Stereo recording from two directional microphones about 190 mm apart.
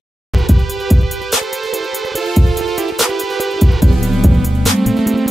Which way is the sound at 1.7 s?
Centre (ahead or behind).